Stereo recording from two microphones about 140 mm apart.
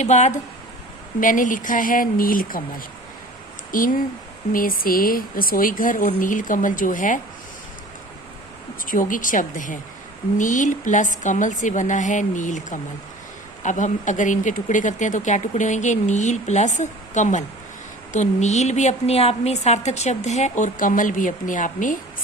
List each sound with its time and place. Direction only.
0.0 s a woman's voice: 55° left (ahead or behind)
1.2 s speech: 70° left (ahead or behind)
8.9 s a woman's voice: 75° left (ahead or behind)